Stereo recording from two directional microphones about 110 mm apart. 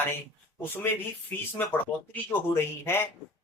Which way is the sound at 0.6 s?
20° left (ahead or behind).